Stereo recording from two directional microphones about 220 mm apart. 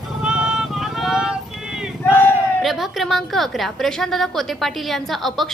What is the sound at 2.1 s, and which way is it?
A woman's voice, 10° left (ahead or behind).